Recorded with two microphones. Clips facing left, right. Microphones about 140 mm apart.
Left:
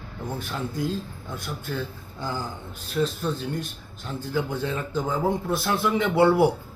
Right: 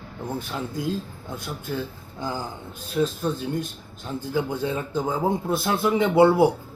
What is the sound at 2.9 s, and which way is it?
Speech, 15° right (ahead or behind).